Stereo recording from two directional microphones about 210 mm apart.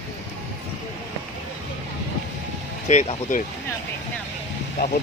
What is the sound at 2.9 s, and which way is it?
Speech, 35° left (ahead or behind).